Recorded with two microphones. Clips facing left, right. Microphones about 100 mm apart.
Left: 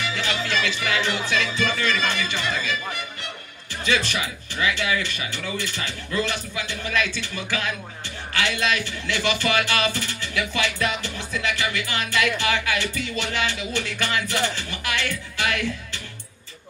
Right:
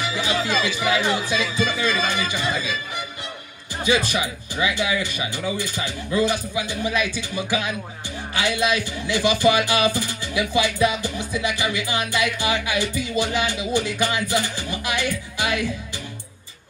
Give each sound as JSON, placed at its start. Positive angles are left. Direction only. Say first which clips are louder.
{"t": 0.1, "sound": "speech", "louder": "right 5 dB", "side_deg": -15}
{"t": 3.8, "sound": "speech", "louder": "right 3 dB", "side_deg": -15}